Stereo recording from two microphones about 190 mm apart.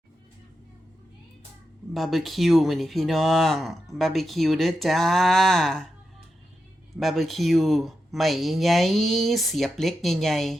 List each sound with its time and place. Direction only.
1.9 s speech: centre (ahead or behind)
7.0 s speech: centre (ahead or behind)